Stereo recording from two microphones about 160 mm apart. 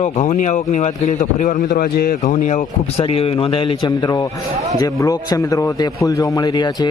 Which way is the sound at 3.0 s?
35° left (ahead or behind).